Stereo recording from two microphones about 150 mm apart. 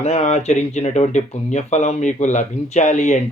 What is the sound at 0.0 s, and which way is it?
Speech, 45° left (ahead or behind).